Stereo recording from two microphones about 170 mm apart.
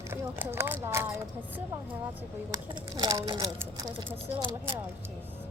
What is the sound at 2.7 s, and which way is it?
Speech, 25° right (ahead or behind).